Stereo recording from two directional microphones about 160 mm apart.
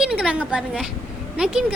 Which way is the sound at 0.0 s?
5° right (ahead or behind).